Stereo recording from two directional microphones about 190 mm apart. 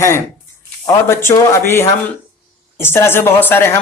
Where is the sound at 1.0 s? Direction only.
15° left (ahead or behind).